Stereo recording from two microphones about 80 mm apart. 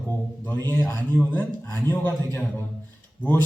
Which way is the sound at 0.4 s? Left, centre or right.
Left.